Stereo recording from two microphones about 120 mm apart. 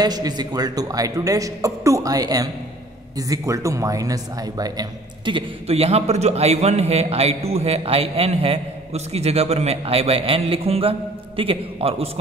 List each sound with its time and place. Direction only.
0.0 s a man's voice: 35° right (ahead or behind); by 12.1 s 50° right (ahead or behind)